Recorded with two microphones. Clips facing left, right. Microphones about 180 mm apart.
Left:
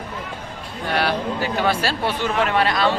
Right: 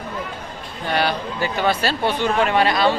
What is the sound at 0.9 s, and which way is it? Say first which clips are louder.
Speech: even; 5° left (ahead or behind).